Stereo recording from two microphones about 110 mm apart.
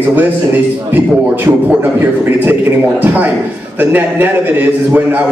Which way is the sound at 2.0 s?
20° right (ahead or behind).